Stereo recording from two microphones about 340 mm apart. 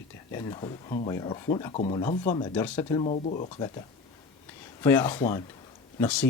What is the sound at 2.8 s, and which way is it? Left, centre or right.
Speech, centre.